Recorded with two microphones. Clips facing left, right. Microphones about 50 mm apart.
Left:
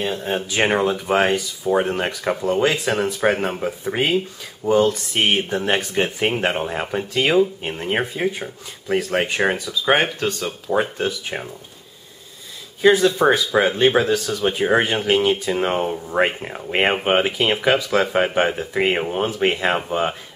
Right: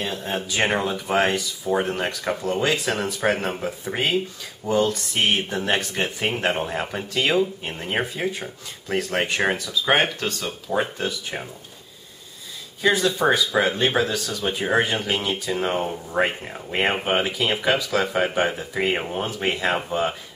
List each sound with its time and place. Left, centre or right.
0.0 s speech: centre
12.8 s speech: centre